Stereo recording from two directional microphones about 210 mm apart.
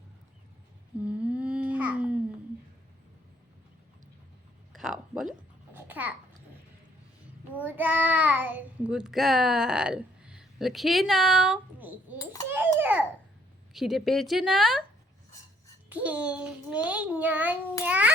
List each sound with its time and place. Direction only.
1.0 s babbling: 5° right (ahead or behind)
4.7 s a sound: centre (ahead or behind)
5.7 s babbling: 10° right (ahead or behind)
7.5 s child singing: 10° right (ahead or behind)
12.2 s a sound: 15° left (ahead or behind)
12.5 s babbling: 10° right (ahead or behind)
13.7 s speech: centre (ahead or behind)
15.9 s a child's voice: 5° right (ahead or behind)